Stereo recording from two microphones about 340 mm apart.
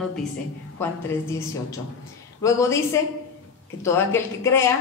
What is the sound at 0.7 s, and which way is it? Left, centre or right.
Speech, centre.